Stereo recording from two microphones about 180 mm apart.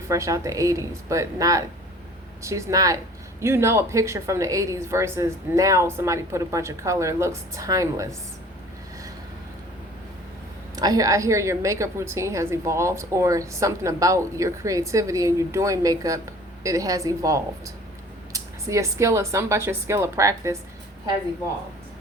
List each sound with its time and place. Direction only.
0.1 s a woman's voice: 15° right (ahead or behind)
10.8 s a woman's voice: 20° right (ahead or behind)